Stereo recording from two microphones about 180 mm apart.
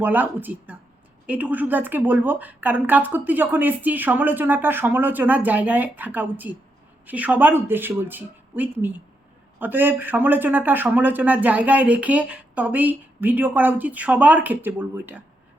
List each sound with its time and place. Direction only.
0.0 s speech: 10° right (ahead or behind)